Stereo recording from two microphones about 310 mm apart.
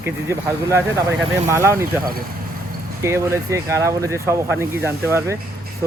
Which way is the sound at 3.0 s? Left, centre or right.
Centre.